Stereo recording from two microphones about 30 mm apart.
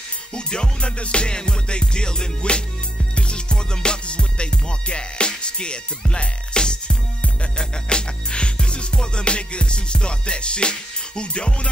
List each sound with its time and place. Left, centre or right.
0.3 s music: left